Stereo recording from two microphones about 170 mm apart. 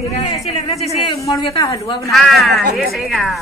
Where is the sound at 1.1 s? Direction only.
20° left (ahead or behind).